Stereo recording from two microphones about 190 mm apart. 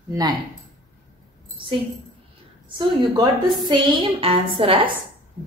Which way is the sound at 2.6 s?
25° right (ahead or behind).